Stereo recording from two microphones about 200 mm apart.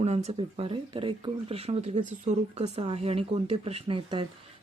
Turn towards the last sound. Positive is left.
turn(degrees=-25)  # may be behind; listen again after turning